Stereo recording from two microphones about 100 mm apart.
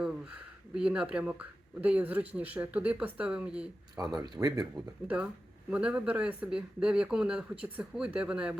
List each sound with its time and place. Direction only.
0.8 s speech: 10° right (ahead or behind)
3.9 s speech: 35° right (ahead or behind)
4.7 s speech: 10° right (ahead or behind)